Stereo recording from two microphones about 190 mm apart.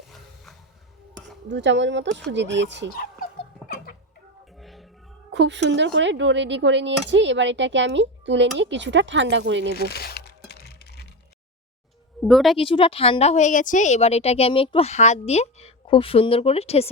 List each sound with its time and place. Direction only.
1.5 s speech: 70° right (ahead or behind)
2.9 s fowl: 50° left (ahead or behind)
4.6 s music: centre (ahead or behind)
5.3 s speech: 70° right (ahead or behind)
9.7 s crumpling: 55° left (ahead or behind)
12.2 s a woman's voice: centre (ahead or behind)
12.5 s a woman's voice: 30° left (ahead or behind)